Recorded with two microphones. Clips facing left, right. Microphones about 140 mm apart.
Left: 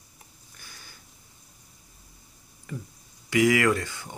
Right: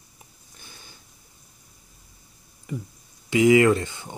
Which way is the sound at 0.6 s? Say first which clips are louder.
Right 2 dB; 20° right (ahead or behind).